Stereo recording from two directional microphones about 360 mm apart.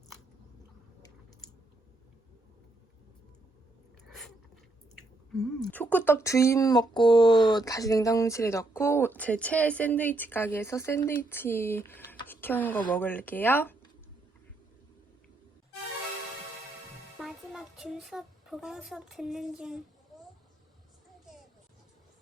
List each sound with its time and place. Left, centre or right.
5.4 s speech: centre
17.2 s a child's voice: centre